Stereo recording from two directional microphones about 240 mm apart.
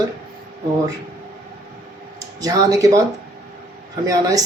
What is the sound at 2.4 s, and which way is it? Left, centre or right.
Speech, centre.